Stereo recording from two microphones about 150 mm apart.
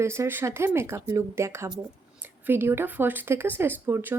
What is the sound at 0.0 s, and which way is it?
Speech, 20° right (ahead or behind).